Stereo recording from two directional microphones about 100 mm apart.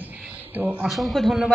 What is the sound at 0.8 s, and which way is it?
Speech, centre (ahead or behind).